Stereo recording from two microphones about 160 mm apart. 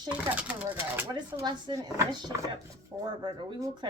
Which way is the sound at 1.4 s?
25° right (ahead or behind).